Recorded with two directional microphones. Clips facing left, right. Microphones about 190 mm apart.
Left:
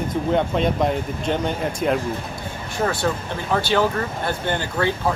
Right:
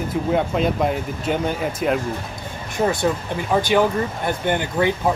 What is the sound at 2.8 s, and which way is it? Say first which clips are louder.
Speech: right 3 dB; 15° right (ahead or behind).